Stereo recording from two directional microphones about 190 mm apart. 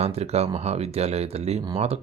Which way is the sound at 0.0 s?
35° right (ahead or behind).